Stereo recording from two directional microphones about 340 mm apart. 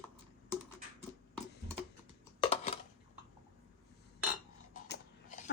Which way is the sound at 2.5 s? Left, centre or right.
Centre.